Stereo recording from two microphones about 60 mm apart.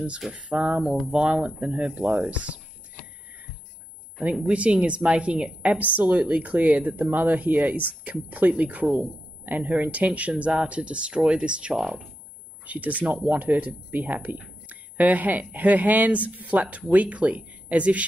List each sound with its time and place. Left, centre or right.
0.3 s speech: centre
4.4 s speech: centre
12.6 s speech: right